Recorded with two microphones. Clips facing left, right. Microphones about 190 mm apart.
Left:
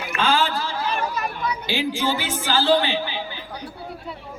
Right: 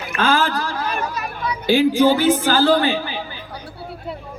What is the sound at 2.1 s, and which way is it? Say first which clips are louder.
Speech: right 8 dB; 45° right (ahead or behind).